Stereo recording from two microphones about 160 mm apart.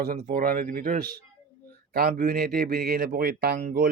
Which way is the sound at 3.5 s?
60° right (ahead or behind).